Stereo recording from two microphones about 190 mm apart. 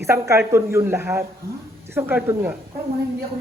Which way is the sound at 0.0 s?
15° right (ahead or behind).